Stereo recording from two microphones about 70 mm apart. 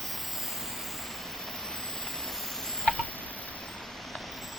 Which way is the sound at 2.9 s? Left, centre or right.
Left.